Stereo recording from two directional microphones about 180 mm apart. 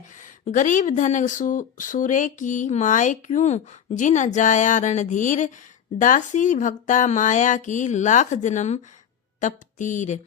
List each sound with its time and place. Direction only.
0.2 s speech: 45° left (ahead or behind)